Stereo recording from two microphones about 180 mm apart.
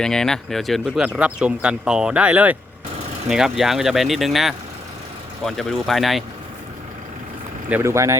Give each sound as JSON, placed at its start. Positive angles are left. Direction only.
{"t": 0.0, "sound": "speech", "side_deg": 5}
{"t": 7.7, "sound": "speech", "side_deg": -15}